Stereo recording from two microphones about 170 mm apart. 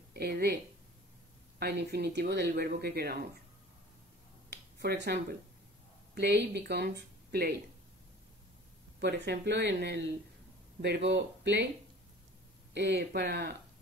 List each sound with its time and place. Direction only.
0.1 s speech: 70° right (ahead or behind)
1.6 s speech: 75° right (ahead or behind)
4.5 s finger snapping: 85° right
6.1 s speech: 80° right
9.0 s speech: 85° right
11.1 s speech: 90° right
12.7 s speech: 85° right